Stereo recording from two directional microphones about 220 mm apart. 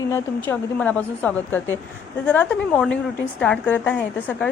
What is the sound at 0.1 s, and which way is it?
A woman's voice, 5° left (ahead or behind).